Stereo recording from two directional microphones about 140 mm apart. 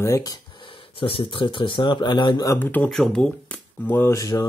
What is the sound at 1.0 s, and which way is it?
Speech, 40° left (ahead or behind).